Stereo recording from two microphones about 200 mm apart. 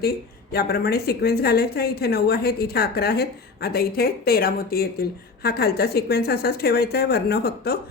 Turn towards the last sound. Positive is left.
turn(degrees=50)  # may be behind; listen again after turning